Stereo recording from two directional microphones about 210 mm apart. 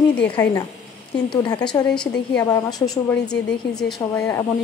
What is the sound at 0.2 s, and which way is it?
A woman's voice, 10° left (ahead or behind).